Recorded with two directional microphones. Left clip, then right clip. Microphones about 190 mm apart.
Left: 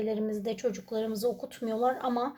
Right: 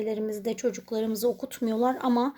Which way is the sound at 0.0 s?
35° right (ahead or behind).